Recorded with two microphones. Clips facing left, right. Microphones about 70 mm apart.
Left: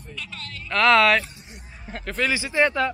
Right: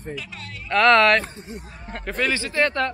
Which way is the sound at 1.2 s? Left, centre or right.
Right.